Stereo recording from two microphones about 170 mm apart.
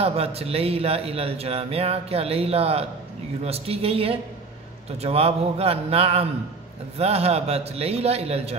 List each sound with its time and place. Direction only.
0.0 s a man's voice: 35° right (ahead or behind)